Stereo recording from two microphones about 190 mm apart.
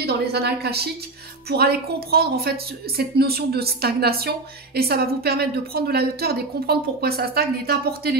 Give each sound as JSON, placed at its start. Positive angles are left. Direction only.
{"t": 0.0, "sound": "speech", "side_deg": -55}